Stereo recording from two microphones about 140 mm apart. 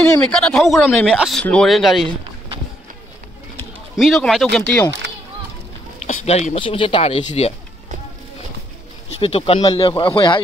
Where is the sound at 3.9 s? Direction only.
Centre (ahead or behind).